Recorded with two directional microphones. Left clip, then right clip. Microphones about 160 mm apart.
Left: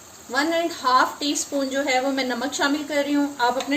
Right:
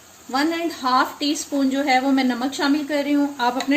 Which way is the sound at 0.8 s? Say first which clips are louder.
Right 1 dB; 55° right (ahead or behind).